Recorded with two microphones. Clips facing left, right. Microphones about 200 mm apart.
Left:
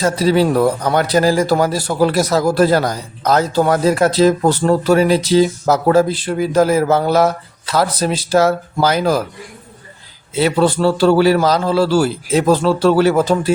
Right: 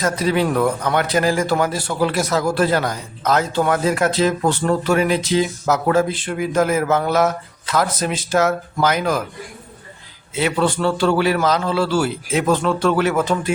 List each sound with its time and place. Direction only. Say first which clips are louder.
0.0 s a man's voice: left 5 dB; 35° left (ahead or behind)
10.3 s a man's voice: left 5 dB; 35° left (ahead or behind)